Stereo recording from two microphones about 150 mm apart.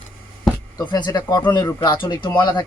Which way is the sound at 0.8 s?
30° left (ahead or behind).